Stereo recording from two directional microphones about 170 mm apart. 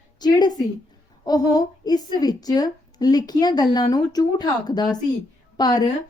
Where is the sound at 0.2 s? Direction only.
25° left (ahead or behind).